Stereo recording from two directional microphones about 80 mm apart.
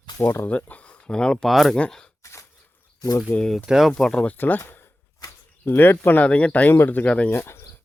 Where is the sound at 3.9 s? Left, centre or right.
Centre.